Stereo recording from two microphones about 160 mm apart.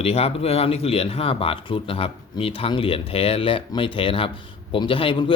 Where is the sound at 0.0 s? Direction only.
40° left (ahead or behind).